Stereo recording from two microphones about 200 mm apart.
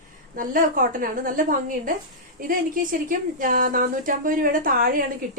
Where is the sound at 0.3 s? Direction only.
45° right (ahead or behind).